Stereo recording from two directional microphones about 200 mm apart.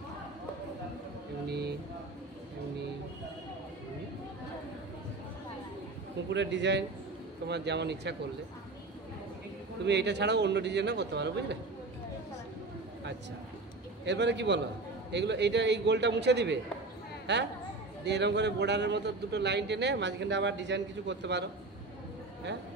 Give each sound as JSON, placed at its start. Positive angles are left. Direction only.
{"t": 1.5, "sound": "speech", "side_deg": -55}
{"t": 6.3, "sound": "a man's voice", "side_deg": -60}
{"t": 9.8, "sound": "a man's voice", "side_deg": -55}
{"t": 14.0, "sound": "a man's voice", "side_deg": -60}